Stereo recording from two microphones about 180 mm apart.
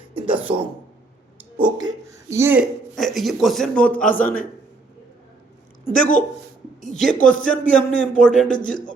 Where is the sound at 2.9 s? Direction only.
Centre (ahead or behind).